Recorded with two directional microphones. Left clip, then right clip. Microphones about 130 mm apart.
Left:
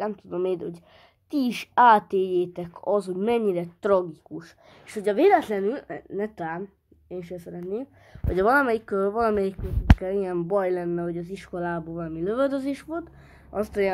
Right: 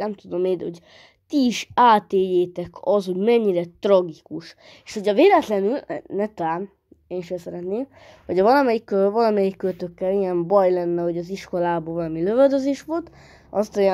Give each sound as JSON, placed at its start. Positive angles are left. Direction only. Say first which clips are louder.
{"t": 0.0, "sound": "a woman's voice", "louder": "right 4 dB", "side_deg": -30}